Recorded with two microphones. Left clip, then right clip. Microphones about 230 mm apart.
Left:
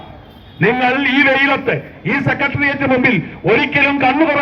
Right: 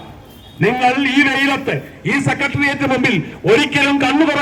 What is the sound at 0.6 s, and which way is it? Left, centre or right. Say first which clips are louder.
A man's voice: left 1 dB; right.